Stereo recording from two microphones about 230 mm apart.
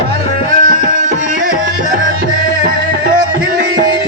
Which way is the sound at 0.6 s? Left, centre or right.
Right.